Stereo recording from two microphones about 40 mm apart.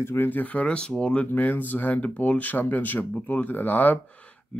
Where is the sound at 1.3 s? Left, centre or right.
Left.